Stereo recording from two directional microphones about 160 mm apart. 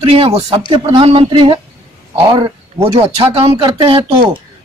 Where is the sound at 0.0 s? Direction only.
40° right (ahead or behind).